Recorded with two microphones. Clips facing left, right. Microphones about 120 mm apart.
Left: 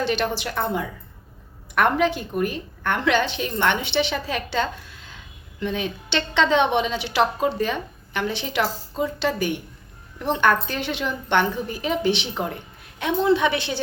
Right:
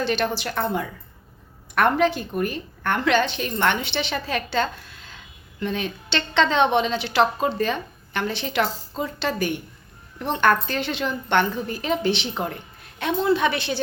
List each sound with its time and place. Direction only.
0.0 s a woman's voice: 15° left (ahead or behind)